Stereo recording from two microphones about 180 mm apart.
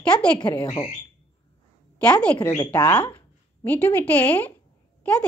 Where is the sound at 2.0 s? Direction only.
5° left (ahead or behind).